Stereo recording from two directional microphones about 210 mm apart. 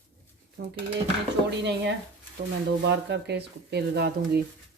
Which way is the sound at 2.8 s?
55° right (ahead or behind).